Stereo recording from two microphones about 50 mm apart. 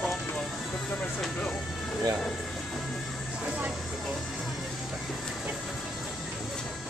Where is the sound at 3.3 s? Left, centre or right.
Centre.